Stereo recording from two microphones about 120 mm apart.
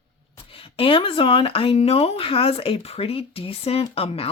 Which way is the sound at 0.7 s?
50° left (ahead or behind).